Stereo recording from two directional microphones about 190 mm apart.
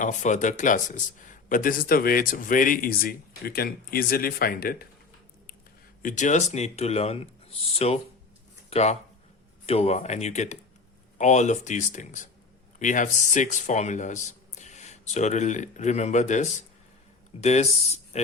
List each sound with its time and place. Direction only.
0.0 s speech: 40° left (ahead or behind)
6.0 s speech: 40° left (ahead or behind)